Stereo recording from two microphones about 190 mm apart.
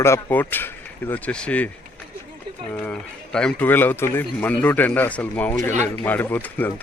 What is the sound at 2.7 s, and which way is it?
Speech, 5° left (ahead or behind).